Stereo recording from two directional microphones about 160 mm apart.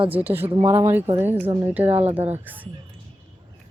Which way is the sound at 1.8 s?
40° right (ahead or behind).